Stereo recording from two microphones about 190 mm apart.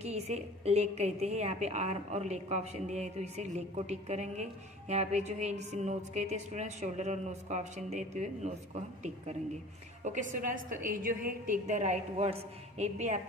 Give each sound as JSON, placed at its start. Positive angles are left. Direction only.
{"t": 0.0, "sound": "a woman's voice", "side_deg": -35}
{"t": 10.0, "sound": "a woman's voice", "side_deg": -45}